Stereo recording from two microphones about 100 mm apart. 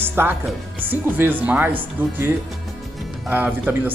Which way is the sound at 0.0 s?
20° right (ahead or behind).